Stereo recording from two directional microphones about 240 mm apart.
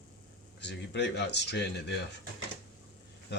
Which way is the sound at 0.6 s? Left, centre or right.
Left.